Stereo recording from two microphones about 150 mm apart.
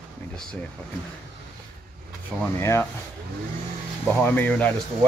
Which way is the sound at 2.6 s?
20° left (ahead or behind).